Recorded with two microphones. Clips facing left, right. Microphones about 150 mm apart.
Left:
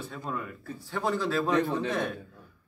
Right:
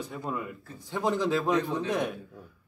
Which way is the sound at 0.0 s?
15° right (ahead or behind).